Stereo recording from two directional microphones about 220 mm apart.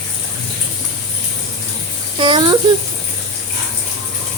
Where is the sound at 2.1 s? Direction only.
20° right (ahead or behind).